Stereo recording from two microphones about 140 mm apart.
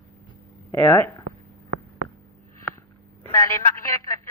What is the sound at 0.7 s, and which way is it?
Speech, 15° left (ahead or behind).